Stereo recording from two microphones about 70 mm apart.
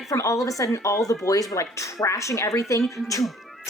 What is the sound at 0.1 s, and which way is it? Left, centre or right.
Speech, left.